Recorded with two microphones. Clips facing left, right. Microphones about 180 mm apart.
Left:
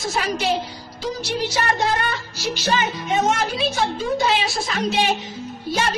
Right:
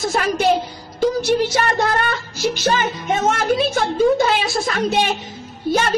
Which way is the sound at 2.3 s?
50° right (ahead or behind).